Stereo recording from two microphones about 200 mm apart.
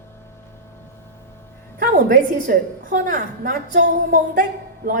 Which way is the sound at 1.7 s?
40° right (ahead or behind).